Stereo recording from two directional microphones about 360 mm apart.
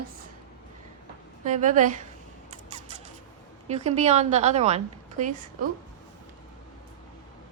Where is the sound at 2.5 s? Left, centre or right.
Centre.